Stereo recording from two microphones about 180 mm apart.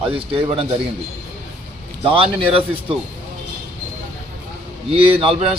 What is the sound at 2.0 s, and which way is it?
Speech, 30° right (ahead or behind).